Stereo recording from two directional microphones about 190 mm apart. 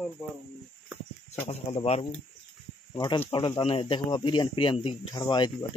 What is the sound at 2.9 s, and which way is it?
Speech, 20° left (ahead or behind).